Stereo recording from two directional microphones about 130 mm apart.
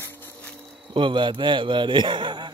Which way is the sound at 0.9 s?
40° right (ahead or behind).